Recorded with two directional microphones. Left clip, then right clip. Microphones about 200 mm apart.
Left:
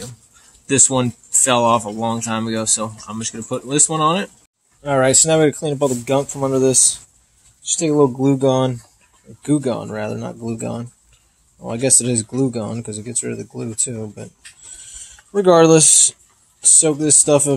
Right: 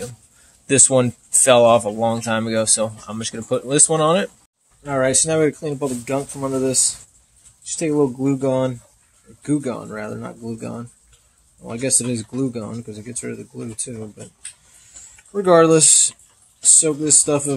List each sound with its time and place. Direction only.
0.7 s speech: 5° right (ahead or behind)
4.8 s speech: 35° left (ahead or behind)
15.3 s speech: 30° left (ahead or behind)